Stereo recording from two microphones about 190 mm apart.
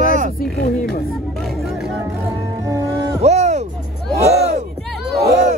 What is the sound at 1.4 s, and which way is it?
Music, centre (ahead or behind).